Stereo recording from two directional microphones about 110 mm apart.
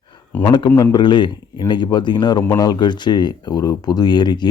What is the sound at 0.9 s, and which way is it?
Speech, 45° left (ahead or behind).